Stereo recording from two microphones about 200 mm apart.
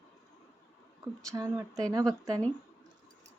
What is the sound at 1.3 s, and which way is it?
Speech, 15° right (ahead or behind).